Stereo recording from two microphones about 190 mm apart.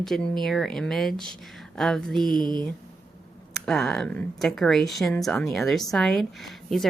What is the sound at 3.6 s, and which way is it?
A woman's voice, 5° left (ahead or behind).